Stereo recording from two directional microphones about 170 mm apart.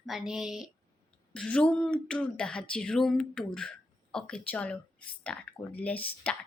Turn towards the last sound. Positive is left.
turn(degrees=10)  # may be behind; listen again after turning